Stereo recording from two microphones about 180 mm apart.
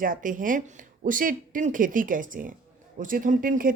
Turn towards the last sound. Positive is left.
turn(degrees=-50)  # may be behind; listen again after turning